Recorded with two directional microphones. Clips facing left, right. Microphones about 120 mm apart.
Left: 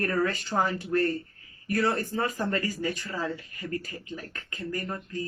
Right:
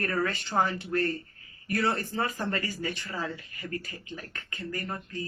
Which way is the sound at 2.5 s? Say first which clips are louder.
Left 3 dB; 40° left (ahead or behind).